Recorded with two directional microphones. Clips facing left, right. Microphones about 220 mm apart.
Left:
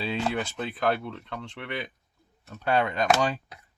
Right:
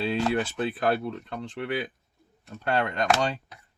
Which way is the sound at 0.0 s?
Centre (ahead or behind).